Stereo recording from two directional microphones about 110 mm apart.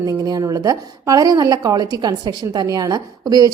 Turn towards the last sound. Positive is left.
turn(degrees=-35)  # may be behind; listen again after turning